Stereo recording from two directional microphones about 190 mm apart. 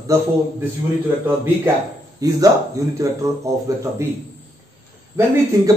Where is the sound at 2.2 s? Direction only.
20° right (ahead or behind).